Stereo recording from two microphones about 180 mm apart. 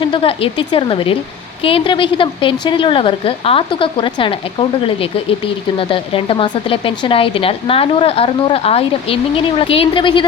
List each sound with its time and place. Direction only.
0.0 s a woman's voice: 30° left (ahead or behind)